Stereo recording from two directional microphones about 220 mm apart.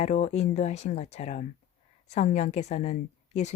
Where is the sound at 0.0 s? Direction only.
30° left (ahead or behind).